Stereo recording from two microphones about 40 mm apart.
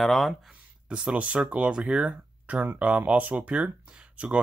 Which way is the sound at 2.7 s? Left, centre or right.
Right.